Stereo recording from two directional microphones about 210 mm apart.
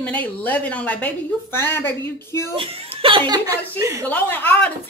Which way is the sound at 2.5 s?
25° right (ahead or behind).